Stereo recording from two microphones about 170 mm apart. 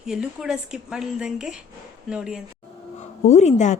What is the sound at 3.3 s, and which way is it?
Speech, 40° left (ahead or behind).